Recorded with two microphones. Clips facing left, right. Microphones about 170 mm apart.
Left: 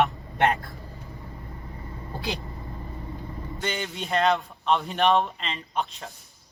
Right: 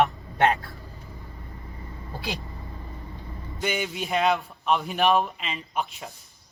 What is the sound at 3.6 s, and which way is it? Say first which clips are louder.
A man's voice: right 3 dB; 10° right (ahead or behind).